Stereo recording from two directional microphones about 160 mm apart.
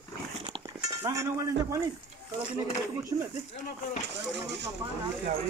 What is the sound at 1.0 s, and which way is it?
Speech, 20° right (ahead or behind).